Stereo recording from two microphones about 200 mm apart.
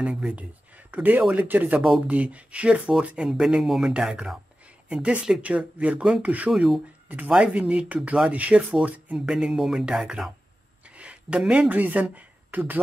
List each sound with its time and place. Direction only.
0.0 s speech: 5° right (ahead or behind)